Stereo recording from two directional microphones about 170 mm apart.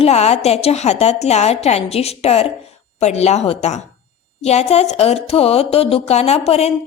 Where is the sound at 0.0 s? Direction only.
40° left (ahead or behind).